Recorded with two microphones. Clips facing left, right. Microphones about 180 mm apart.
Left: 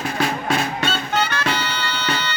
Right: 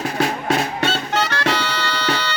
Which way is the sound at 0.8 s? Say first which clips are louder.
Right 1 dB; 70° right (ahead or behind).